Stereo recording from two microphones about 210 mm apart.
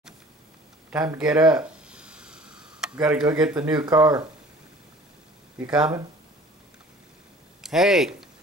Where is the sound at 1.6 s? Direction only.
5° right (ahead or behind).